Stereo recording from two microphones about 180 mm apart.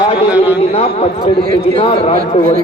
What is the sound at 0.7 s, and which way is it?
Speech, 35° left (ahead or behind).